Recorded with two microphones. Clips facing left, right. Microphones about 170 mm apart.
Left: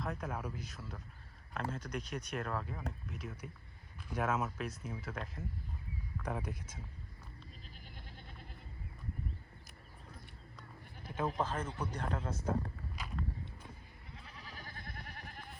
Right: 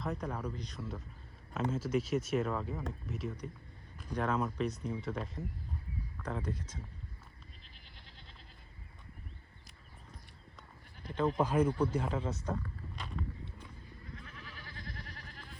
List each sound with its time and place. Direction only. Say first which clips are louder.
0.0 s speech: right 2 dB; centre (ahead or behind)
11.0 s speech: right 5 dB; 5° left (ahead or behind)
11.3 s speech: right 8 dB; 10° right (ahead or behind)
13.0 s walk: even; centre (ahead or behind)
14.5 s goat: even; 45° left (ahead or behind)